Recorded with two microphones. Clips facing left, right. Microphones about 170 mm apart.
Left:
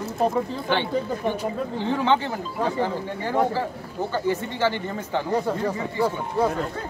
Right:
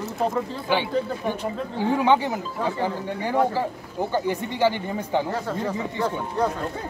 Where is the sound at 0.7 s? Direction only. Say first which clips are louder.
Right 1 dB; 10° right (ahead or behind).